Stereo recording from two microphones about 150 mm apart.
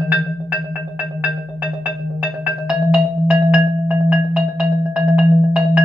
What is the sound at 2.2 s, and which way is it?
Music, 5° right (ahead or behind).